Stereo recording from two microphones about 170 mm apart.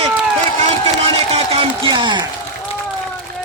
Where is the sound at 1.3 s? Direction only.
35° right (ahead or behind).